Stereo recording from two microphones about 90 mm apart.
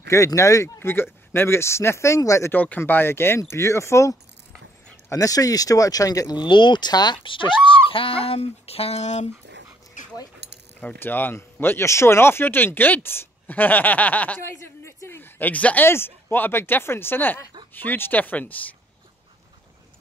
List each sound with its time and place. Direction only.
0.1 s a woman's voice: 35° left (ahead or behind)
2.5 s a woman's voice: 20° left (ahead or behind); by 8.9 s 90° left
10.8 s a woman's voice: 20° left (ahead or behind)
14.4 s a woman's voice: 30° left (ahead or behind)